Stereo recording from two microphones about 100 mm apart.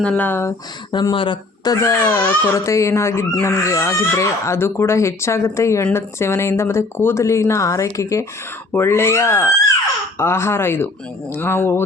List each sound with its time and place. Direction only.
0.0 s speech: 15° left (ahead or behind)
1.1 s speech: 60° left (ahead or behind)
1.6 s speech: 35° left (ahead or behind)